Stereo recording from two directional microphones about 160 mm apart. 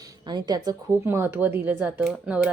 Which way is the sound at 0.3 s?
25° right (ahead or behind).